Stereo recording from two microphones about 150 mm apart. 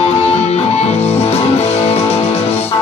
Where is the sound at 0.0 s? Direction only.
45° left (ahead or behind).